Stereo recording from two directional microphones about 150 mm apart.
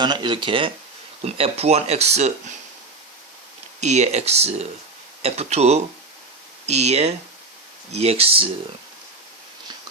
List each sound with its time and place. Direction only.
0.0 s speech: 30° right (ahead or behind); by 2.3 s 45° right (ahead or behind)
3.8 s speech: 50° right (ahead or behind)